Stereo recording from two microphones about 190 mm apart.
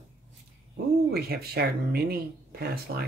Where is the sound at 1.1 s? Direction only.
55° right (ahead or behind).